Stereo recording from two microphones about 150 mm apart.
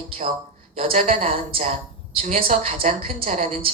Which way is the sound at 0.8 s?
40° right (ahead or behind).